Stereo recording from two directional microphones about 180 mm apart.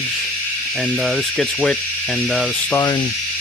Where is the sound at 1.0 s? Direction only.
Centre (ahead or behind).